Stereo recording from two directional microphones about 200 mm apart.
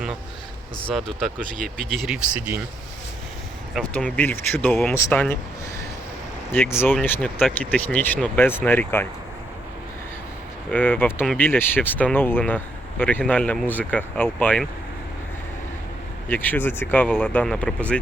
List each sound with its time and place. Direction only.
0.9 s speech: centre (ahead or behind)
3.8 s speech: 5° left (ahead or behind)
6.5 s speech: 10° left (ahead or behind)
10.7 s speech: 10° left (ahead or behind)
16.3 s speech: 10° left (ahead or behind)